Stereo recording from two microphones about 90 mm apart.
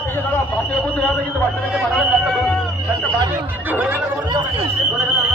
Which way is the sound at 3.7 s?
20° right (ahead or behind).